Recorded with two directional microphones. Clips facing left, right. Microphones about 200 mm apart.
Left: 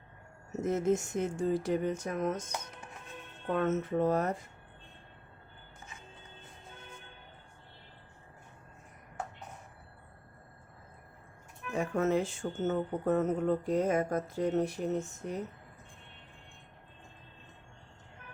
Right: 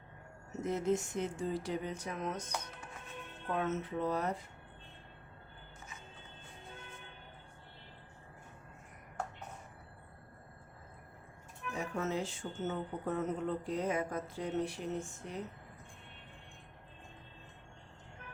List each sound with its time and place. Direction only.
0.6 s speech: 45° left (ahead or behind)
3.5 s speech: 50° left (ahead or behind)
11.8 s speech: 55° left (ahead or behind)